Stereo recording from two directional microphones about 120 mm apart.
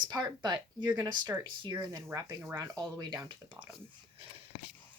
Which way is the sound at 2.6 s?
30° right (ahead or behind).